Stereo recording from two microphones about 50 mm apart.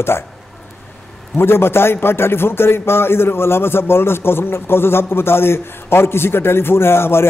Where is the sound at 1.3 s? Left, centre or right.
Left.